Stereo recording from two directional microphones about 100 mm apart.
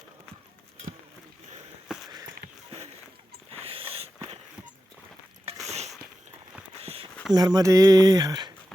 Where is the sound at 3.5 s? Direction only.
70° right (ahead or behind).